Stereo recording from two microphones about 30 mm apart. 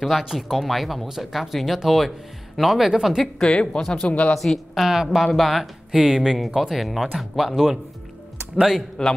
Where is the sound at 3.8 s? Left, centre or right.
Centre.